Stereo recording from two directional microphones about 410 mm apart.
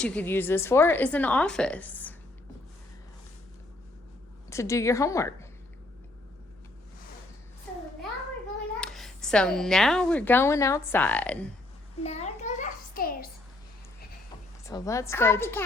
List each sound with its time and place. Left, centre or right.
0.0 s a woman's voice: centre
4.4 s a woman's voice: centre
8.8 s a woman's voice: centre
12.0 s a sound: centre
14.7 s a woman's voice: centre